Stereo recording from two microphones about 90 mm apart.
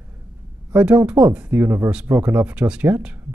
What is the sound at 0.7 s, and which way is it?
Speech, 15° right (ahead or behind).